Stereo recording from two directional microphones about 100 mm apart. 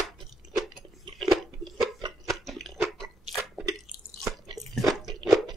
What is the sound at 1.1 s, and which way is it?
Chewing, centre (ahead or behind).